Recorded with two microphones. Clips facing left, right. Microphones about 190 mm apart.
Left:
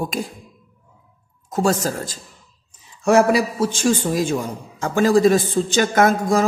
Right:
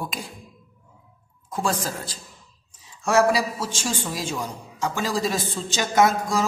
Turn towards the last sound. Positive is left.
turn(degrees=55)  # may be behind; listen again after turning